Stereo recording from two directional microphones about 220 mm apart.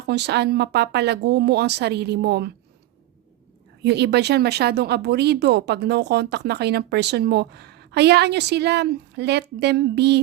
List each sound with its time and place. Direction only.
0.0 s speech: 50° right (ahead or behind)
3.8 s speech: 50° right (ahead or behind)